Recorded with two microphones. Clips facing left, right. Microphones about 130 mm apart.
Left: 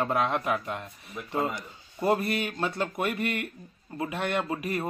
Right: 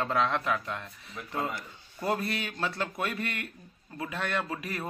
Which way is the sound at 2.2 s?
50° left (ahead or behind).